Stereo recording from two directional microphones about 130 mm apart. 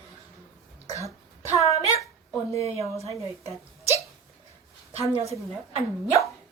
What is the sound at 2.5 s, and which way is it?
Speech, 50° right (ahead or behind).